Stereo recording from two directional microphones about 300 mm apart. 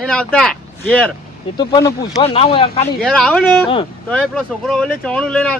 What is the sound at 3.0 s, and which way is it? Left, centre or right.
Speech, centre.